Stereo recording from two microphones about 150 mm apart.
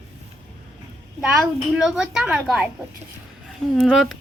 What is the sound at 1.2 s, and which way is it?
Speech, 5° right (ahead or behind).